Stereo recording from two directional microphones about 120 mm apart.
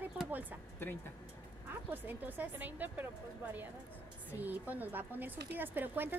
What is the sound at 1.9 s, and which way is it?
Speech, 15° right (ahead or behind).